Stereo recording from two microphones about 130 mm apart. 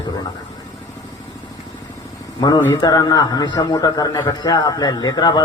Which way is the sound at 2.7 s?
30° left (ahead or behind).